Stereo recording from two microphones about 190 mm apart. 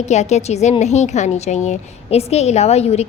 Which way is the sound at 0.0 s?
35° left (ahead or behind).